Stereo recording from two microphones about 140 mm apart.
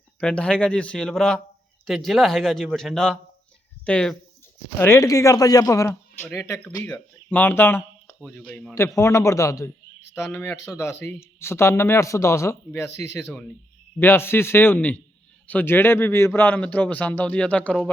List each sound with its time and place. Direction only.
0.2 s a man's voice: 5° left (ahead or behind)
4.8 s speech: 20° left (ahead or behind)
8.7 s speech: 20° left (ahead or behind)